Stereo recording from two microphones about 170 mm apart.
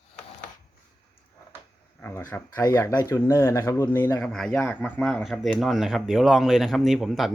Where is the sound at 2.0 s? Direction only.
10° left (ahead or behind).